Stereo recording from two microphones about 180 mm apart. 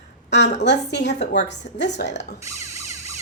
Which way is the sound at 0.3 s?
75° left (ahead or behind).